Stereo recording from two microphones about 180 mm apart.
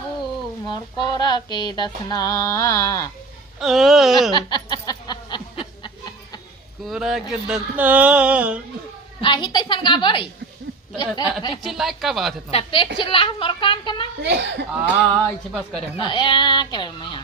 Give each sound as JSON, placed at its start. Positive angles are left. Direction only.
{"t": 0.7, "sound": "music", "side_deg": 25}
{"t": 3.6, "sound": "speech", "side_deg": 0}
{"t": 4.4, "sound": "snicker", "side_deg": 25}
{"t": 6.8, "sound": "speech", "side_deg": 0}
{"t": 9.2, "sound": "music", "side_deg": 25}
{"t": 11.6, "sound": "speech", "side_deg": 0}
{"t": 12.5, "sound": "a woman's voice", "side_deg": 30}
{"t": 13.0, "sound": "music", "side_deg": 30}
{"t": 14.2, "sound": "speech", "side_deg": -70}
{"t": 16.0, "sound": "music", "side_deg": 25}